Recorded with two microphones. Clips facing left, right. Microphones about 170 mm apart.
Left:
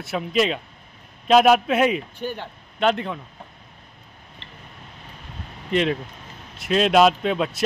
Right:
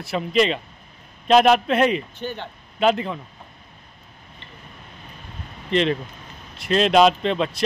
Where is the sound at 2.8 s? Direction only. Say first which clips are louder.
Right 2 dB; centre (ahead or behind).